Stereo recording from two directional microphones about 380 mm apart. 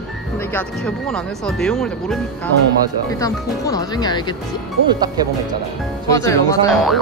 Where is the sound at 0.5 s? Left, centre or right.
Centre.